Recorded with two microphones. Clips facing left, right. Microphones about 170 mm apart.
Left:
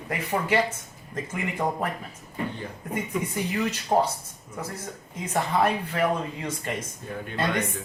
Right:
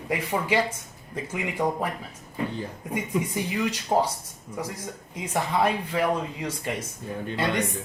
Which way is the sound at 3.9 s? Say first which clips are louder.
Left 1 dB; 5° right (ahead or behind).